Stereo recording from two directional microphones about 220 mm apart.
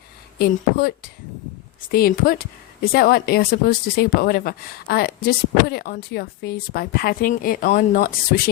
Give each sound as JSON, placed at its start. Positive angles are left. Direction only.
{"t": 0.3, "sound": "a woman's voice", "side_deg": 45}